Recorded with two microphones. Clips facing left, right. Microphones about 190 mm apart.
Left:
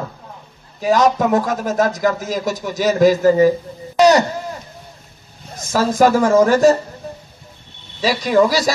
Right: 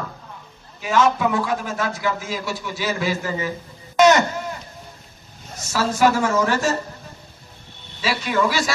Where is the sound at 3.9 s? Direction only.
35° left (ahead or behind).